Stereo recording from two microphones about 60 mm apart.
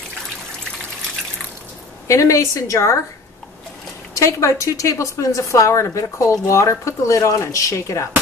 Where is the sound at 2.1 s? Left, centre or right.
Left.